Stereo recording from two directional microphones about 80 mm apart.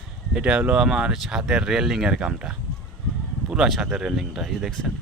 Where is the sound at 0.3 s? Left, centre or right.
Centre.